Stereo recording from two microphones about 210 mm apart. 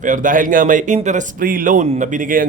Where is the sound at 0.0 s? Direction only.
40° right (ahead or behind).